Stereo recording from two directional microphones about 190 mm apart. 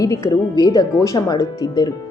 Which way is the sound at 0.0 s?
20° left (ahead or behind).